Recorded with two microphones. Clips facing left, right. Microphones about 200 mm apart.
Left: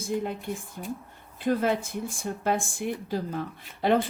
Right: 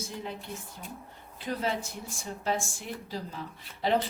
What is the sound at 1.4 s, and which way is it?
Speech, 50° left (ahead or behind).